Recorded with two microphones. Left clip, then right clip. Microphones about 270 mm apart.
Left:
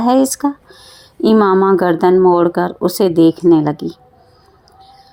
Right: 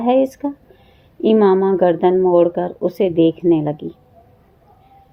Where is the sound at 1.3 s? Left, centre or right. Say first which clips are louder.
Left 2 dB; left.